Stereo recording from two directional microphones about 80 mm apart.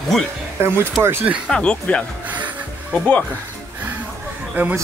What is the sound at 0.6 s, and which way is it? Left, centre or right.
Speech, right.